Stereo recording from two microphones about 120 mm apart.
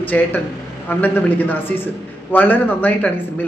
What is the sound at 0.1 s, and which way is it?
Speech, 15° left (ahead or behind).